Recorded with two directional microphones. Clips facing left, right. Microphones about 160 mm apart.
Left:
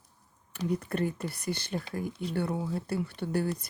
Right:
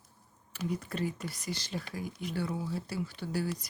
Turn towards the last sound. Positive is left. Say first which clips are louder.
# left 4 dB
turn(degrees=55)  # may be behind; listen again after turning